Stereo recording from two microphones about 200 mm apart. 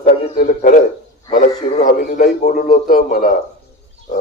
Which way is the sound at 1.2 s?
35° left (ahead or behind).